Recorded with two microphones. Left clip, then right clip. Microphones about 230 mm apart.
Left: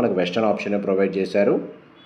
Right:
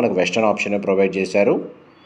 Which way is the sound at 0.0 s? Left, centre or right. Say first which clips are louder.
Right 3 dB; right.